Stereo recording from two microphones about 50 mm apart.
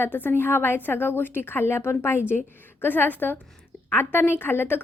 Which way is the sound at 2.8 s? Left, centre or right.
Left.